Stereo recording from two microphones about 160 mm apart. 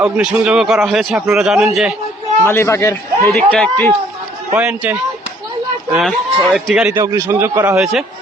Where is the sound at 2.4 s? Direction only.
15° left (ahead or behind).